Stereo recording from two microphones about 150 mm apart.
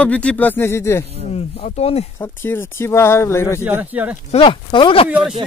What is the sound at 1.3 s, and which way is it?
Speech, 45° left (ahead or behind).